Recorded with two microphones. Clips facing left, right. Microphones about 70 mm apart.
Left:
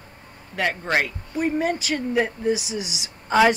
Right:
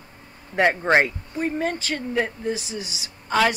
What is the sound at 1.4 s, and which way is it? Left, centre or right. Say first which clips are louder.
Speech: left 2 dB; centre.